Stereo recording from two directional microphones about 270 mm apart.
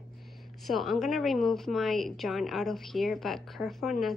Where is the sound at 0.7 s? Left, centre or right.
Centre.